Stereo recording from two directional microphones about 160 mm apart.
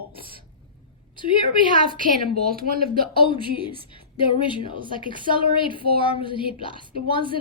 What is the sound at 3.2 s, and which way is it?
A woman's voice, 30° left (ahead or behind).